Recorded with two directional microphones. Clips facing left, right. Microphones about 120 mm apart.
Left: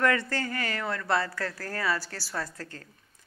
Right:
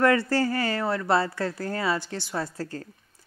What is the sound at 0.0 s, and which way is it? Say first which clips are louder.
A woman's voice: right 5 dB; 30° right (ahead or behind).